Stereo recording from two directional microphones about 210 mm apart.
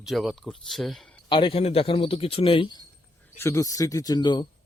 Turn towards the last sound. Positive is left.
turn(degrees=20)  # may be behind; listen again after turning